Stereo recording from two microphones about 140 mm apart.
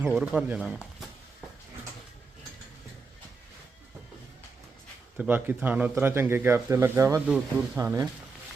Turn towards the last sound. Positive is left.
turn(degrees=-15)  # may be behind; listen again after turning